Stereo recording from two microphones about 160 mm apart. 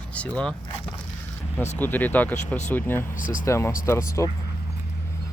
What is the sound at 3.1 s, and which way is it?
Speech, 55° left (ahead or behind).